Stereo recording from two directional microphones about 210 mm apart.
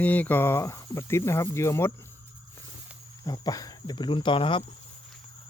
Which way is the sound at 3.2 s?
20° left (ahead or behind).